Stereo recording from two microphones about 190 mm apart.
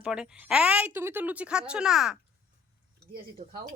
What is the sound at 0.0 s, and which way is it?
Speech, 5° right (ahead or behind).